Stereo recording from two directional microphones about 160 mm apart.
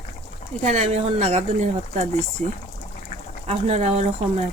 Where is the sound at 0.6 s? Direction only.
45° right (ahead or behind).